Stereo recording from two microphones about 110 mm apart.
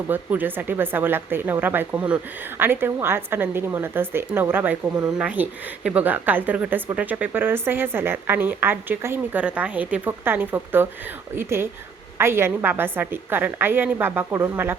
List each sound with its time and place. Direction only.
0.1 s a woman's voice: 15° right (ahead or behind)